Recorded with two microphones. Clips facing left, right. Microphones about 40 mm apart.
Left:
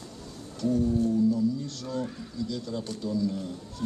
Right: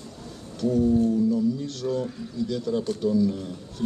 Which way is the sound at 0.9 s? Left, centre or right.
Right.